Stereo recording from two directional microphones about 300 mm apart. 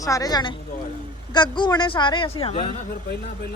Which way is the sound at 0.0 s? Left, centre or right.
Centre.